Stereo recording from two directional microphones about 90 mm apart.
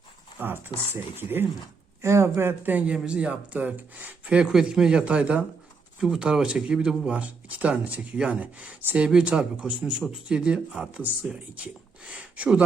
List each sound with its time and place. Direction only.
0.3 s speech: 20° right (ahead or behind)